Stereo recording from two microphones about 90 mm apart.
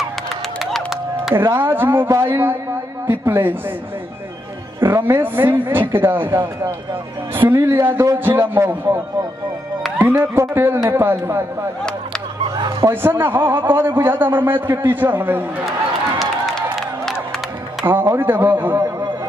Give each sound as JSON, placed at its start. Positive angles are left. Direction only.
{"t": 0.6, "sound": "music", "side_deg": 0}
{"t": 1.3, "sound": "a man's voice", "side_deg": -25}
{"t": 4.7, "sound": "a man's voice", "side_deg": -25}
{"t": 12.4, "sound": "a sound", "side_deg": -60}
{"t": 12.9, "sound": "a man's voice", "side_deg": -25}
{"t": 16.2, "sound": "music", "side_deg": 5}
{"t": 17.8, "sound": "a man's voice", "side_deg": -25}